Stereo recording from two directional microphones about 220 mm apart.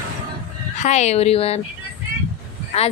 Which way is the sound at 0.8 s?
30° left (ahead or behind).